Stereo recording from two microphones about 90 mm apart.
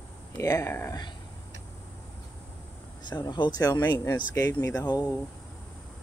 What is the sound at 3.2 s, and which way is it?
Speech, 55° left (ahead or behind).